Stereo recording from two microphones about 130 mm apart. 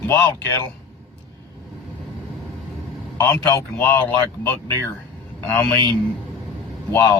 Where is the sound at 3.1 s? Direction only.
25° left (ahead or behind).